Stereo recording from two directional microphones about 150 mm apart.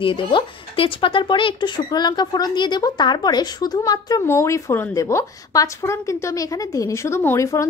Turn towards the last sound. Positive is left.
turn(degrees=20)  # may be behind; listen again after turning